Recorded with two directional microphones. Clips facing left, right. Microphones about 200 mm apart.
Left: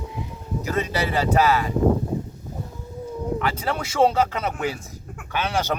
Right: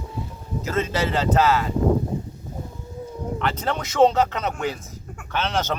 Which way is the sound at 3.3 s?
10° left (ahead or behind).